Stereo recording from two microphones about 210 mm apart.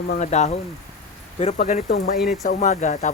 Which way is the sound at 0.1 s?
35° left (ahead or behind).